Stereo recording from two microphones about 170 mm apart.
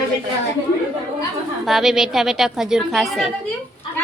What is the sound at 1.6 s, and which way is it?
A woman's voice, centre (ahead or behind).